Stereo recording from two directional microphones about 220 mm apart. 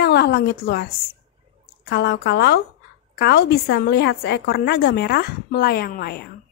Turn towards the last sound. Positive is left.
turn(degrees=45)  # may be behind; listen again after turning